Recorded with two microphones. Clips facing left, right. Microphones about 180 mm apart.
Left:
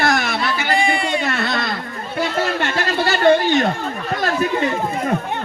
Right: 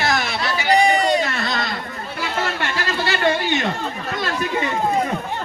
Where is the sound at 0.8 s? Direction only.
40° right (ahead or behind).